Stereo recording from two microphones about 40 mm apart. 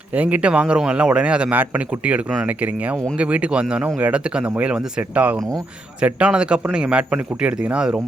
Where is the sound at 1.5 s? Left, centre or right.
Right.